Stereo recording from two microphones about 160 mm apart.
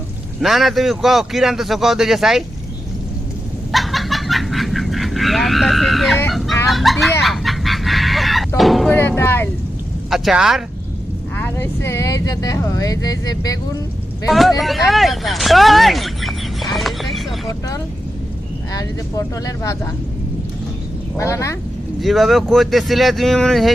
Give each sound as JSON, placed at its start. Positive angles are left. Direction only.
{"t": 0.4, "sound": "a man's voice", "side_deg": 0}
{"t": 3.7, "sound": "a sound", "side_deg": 0}
{"t": 6.7, "sound": "a man's voice", "side_deg": 0}
{"t": 7.2, "sound": "fowl", "side_deg": 0}
{"t": 8.9, "sound": "speech", "side_deg": 10}
{"t": 10.1, "sound": "a man's voice", "side_deg": -5}
{"t": 11.3, "sound": "speech", "side_deg": 15}
{"t": 14.3, "sound": "a man's voice", "side_deg": 0}
{"t": 14.6, "sound": "vehicle", "side_deg": 0}
{"t": 18.7, "sound": "speech", "side_deg": 20}
{"t": 21.2, "sound": "speech", "side_deg": 15}
{"t": 22.0, "sound": "a man's voice", "side_deg": 0}